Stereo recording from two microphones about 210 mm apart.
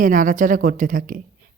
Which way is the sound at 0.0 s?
40° right (ahead or behind).